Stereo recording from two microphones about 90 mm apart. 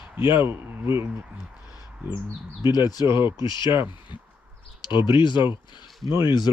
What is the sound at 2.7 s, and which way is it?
Speech, 50° left (ahead or behind).